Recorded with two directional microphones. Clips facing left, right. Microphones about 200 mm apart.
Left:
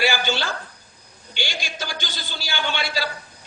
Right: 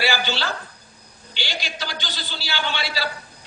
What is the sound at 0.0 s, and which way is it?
Speech, 50° left (ahead or behind).